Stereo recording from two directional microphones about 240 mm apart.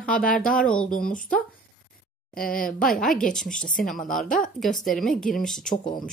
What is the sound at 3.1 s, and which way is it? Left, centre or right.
Speech, centre.